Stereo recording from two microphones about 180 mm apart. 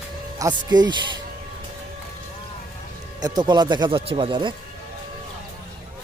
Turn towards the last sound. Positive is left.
turn(degrees=-30)  # may be behind; listen again after turning